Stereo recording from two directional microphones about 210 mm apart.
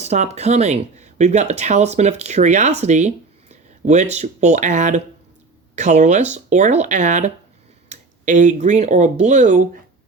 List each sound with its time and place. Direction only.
0.0 s speech: 30° right (ahead or behind)